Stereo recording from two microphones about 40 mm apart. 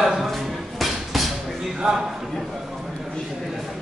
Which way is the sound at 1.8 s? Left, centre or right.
Centre.